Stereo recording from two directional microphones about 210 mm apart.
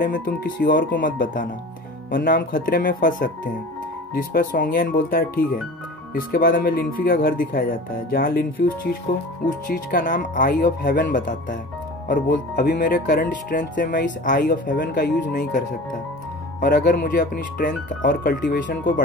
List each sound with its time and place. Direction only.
0.0 s speech: 40° left (ahead or behind)
12.5 s speech: 45° left (ahead or behind)
16.6 s speech: 45° left (ahead or behind)